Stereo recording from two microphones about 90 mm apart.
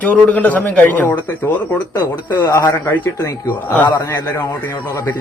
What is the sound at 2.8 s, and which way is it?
A man's voice, 25° left (ahead or behind).